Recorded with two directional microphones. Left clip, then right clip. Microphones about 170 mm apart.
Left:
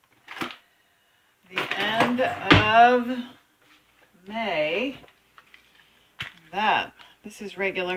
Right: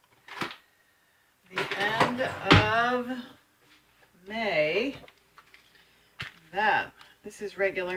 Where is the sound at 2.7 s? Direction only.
45° left (ahead or behind).